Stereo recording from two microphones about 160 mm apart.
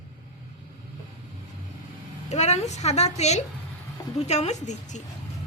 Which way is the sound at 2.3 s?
45° left (ahead or behind).